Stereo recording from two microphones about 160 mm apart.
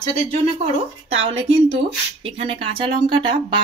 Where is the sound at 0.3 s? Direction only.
40° right (ahead or behind).